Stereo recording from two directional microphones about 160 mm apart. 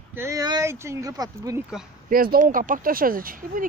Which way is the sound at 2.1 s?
65° right (ahead or behind).